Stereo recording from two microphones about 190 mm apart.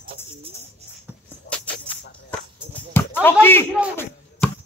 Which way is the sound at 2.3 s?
10° left (ahead or behind).